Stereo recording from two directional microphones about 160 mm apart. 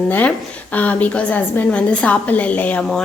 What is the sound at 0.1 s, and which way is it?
A woman's voice, 10° left (ahead or behind).